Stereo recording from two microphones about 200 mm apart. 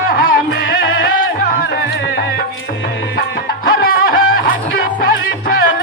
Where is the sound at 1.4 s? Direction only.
45° left (ahead or behind).